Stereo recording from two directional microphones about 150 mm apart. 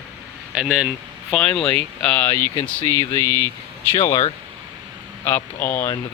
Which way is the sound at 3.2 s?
25° right (ahead or behind).